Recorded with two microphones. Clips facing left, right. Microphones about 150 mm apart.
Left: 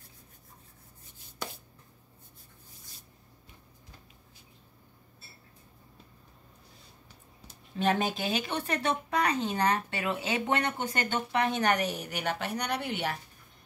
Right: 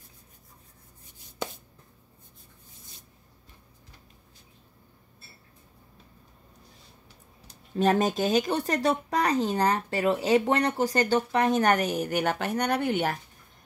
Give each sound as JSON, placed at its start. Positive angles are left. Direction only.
{"t": 7.7, "sound": "a woman's voice", "side_deg": -40}